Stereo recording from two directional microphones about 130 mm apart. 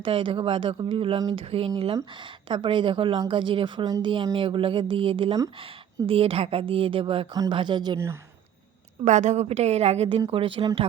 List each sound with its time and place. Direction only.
0.0 s a woman's voice: 40° right (ahead or behind)
7.9 s speech: 20° right (ahead or behind)
9.0 s a woman's voice: 65° right (ahead or behind); by 10.7 s 40° right (ahead or behind)